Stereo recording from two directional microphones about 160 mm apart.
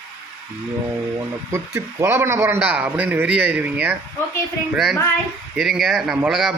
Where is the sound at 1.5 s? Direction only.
20° right (ahead or behind).